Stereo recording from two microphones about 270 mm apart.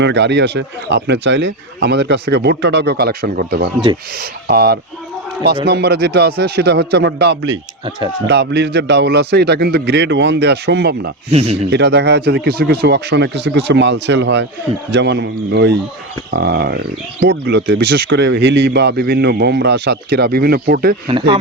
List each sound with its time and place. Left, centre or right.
0.0 s speech: right
7.9 s speech: centre
8.3 s speech: right
11.3 s speech: right
11.7 s speech: right
21.1 s speech: centre